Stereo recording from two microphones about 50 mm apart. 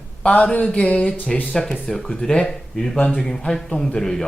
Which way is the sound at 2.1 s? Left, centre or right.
Centre.